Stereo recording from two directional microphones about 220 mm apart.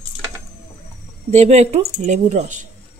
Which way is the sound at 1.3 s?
30° right (ahead or behind).